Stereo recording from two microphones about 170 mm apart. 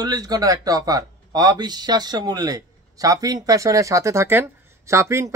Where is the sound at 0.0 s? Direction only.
20° right (ahead or behind).